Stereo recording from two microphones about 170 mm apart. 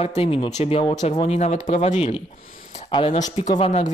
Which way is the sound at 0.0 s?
35° left (ahead or behind).